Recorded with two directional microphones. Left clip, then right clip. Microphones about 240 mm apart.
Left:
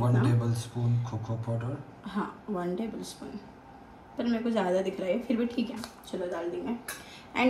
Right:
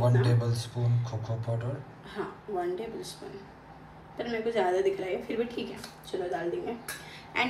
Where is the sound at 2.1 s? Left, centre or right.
Centre.